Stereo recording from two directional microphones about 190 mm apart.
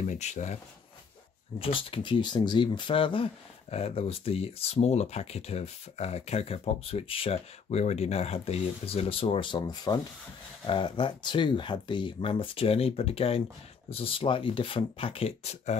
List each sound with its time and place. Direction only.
0.0 s speech: 35° left (ahead or behind)
1.6 s speech: 30° left (ahead or behind)